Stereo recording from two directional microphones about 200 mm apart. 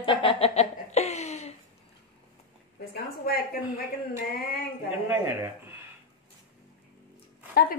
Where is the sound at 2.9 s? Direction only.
50° left (ahead or behind).